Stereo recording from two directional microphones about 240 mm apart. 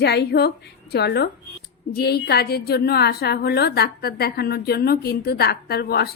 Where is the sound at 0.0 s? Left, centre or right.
Left.